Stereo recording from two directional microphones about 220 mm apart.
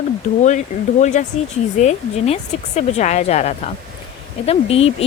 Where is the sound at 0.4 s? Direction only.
35° left (ahead or behind).